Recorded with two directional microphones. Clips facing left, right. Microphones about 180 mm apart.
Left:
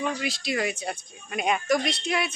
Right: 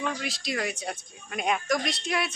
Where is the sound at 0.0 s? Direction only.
Centre (ahead or behind).